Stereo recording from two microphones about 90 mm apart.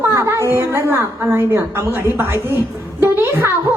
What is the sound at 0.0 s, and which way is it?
A woman's voice, 30° right (ahead or behind).